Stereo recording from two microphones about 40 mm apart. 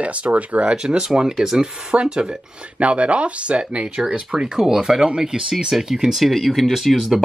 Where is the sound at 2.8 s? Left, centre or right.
Right.